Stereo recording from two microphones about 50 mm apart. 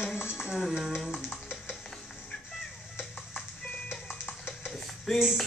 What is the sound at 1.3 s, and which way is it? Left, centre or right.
Stir, left.